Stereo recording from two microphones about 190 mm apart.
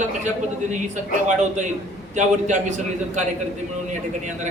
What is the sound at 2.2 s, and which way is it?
A man's voice, 40° right (ahead or behind).